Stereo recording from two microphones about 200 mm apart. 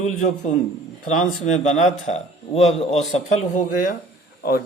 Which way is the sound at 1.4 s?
35° left (ahead or behind).